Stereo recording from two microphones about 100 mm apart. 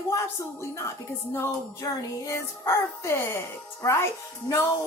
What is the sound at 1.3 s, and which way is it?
Speech, 30° left (ahead or behind).